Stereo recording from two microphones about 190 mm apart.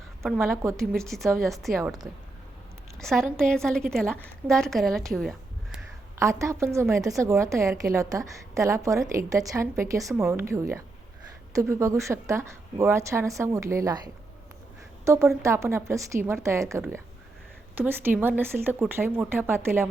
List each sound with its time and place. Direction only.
0.3 s a woman's voice: centre (ahead or behind)
3.0 s a woman's voice: centre (ahead or behind)
6.1 s a woman's voice: 15° right (ahead or behind)
15.0 s a woman's voice: 15° right (ahead or behind)